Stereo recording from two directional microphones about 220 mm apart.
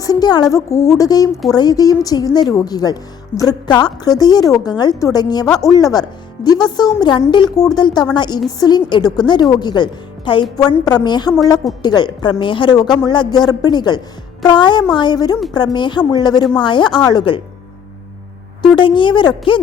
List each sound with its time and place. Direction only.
0.0 s a woman's voice: 15° left (ahead or behind)
18.8 s speech: 20° left (ahead or behind)